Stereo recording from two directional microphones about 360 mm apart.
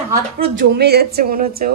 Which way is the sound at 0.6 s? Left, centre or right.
Right.